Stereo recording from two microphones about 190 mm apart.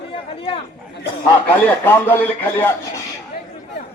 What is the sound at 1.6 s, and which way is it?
A man's voice, 10° left (ahead or behind).